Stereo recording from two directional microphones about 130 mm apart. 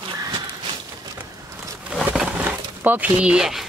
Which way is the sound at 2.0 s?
10° right (ahead or behind).